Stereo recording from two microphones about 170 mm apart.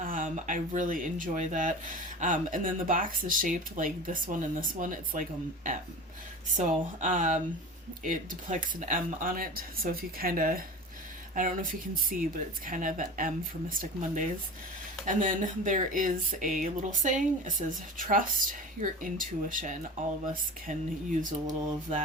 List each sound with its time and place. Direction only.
0.0 s speech: 50° right (ahead or behind)
6.6 s speech: 45° right (ahead or behind)
21.2 s speech: 50° right (ahead or behind)